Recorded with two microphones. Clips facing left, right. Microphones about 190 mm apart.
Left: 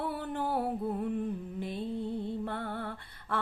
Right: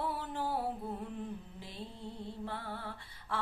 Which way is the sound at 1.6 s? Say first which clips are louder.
Left 11 dB; 55° left (ahead or behind).